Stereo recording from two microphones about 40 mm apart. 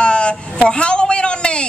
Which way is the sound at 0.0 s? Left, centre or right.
Left.